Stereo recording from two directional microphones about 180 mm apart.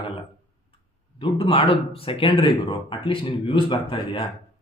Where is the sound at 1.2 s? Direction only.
30° left (ahead or behind).